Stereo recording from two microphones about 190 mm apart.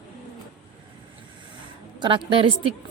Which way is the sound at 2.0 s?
25° right (ahead or behind).